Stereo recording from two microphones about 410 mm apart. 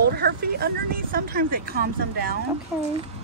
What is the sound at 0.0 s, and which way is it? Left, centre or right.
Vehicle, right.